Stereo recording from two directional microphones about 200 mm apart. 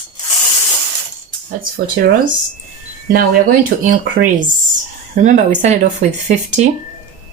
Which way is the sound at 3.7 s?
50° right (ahead or behind).